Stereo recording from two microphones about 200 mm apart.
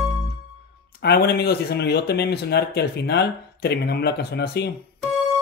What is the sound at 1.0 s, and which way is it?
Speech, 50° left (ahead or behind).